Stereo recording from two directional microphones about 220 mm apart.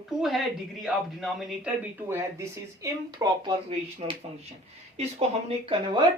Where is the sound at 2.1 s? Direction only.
15° right (ahead or behind).